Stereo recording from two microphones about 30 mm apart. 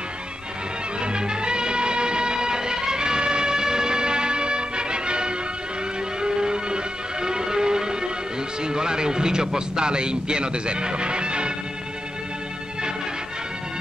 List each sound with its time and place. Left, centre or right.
1.0 s music: right
8.6 s a man's voice: right